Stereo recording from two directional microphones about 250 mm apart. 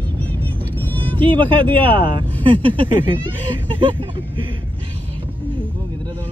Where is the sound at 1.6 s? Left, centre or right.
Centre.